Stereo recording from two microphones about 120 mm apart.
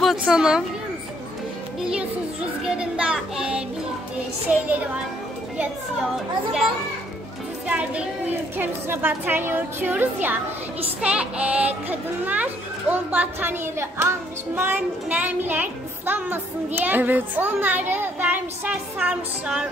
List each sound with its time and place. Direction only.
0.3 s speech: 5° right (ahead or behind)
2.6 s a child's voice: 5° right (ahead or behind)
7.6 s a child's voice: 10° right (ahead or behind)